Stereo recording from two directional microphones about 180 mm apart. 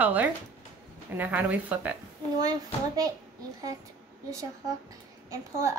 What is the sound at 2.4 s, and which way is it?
Speech, 20° right (ahead or behind).